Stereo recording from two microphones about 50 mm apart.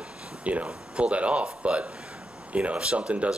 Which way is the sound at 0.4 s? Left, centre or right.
Right.